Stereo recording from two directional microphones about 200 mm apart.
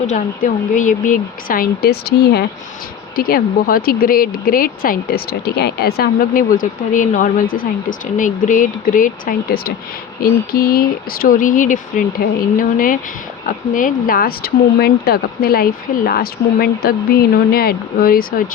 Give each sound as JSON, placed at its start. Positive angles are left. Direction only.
{"t": 0.1, "sound": "speech", "side_deg": 40}